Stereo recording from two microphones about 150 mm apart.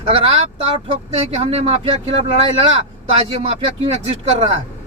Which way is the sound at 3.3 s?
45° right (ahead or behind).